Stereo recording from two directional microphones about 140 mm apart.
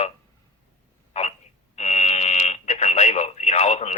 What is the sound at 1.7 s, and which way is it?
Speech, 55° left (ahead or behind).